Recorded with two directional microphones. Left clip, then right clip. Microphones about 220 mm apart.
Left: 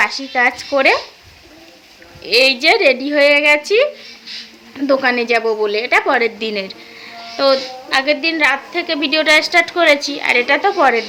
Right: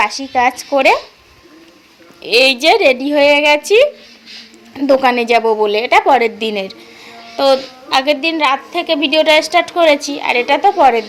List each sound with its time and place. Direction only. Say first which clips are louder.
0.0 s speech: right 1 dB; 10° right (ahead or behind)
2.2 s speech: right 2 dB; 15° right (ahead or behind)
4.9 s speech: right 3 dB; 15° right (ahead or behind)